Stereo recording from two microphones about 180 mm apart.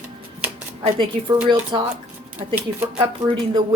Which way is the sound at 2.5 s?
15° right (ahead or behind).